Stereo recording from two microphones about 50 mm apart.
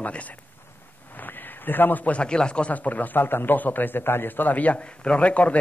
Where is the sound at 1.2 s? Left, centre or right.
Left; by 2.7 s centre.